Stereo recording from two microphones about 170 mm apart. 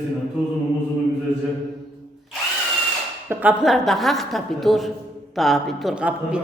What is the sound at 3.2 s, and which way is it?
Speech, 5° right (ahead or behind).